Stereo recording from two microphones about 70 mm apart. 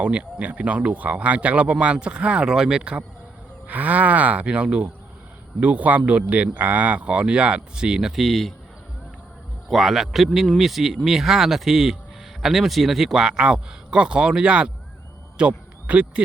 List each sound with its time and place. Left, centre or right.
0.0 s speech: centre
9.6 s speech: centre